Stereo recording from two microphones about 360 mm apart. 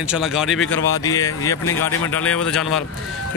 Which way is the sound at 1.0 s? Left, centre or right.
Centre.